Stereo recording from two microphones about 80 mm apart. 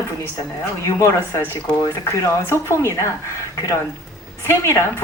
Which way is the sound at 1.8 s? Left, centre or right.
Left.